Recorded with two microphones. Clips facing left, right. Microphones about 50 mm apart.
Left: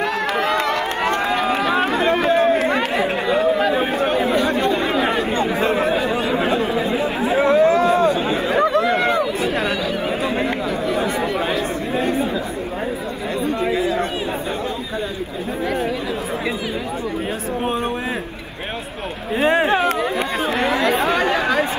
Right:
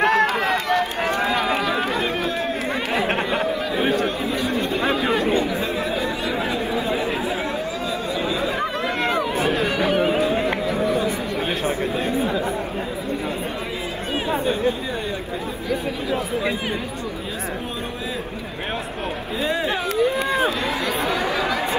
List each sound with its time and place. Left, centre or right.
0.0 s run: right
0.3 s run: left
1.6 s chatter: left
3.9 s chatter: left
4.2 s chatter: left
5.0 s chatter: left
5.3 s chatter: left
7.2 s a sound: left
9.8 s a sound: right
10.2 s a sound: left
12.0 s chatter: left
19.4 s a sound: left
20.4 s chatter: left